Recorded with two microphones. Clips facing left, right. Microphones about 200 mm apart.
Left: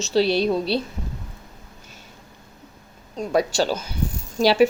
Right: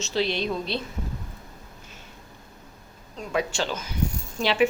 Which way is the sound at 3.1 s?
40° left (ahead or behind).